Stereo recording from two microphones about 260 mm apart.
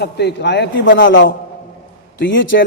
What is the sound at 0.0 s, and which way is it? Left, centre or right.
A man's voice, left.